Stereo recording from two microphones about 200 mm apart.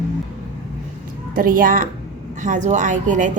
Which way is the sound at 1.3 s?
45° right (ahead or behind).